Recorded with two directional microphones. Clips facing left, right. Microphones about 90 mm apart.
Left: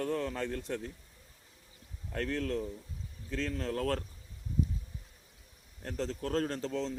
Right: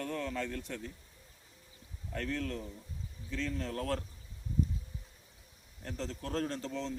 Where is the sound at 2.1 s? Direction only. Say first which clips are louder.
Left 3 dB; 45° left (ahead or behind).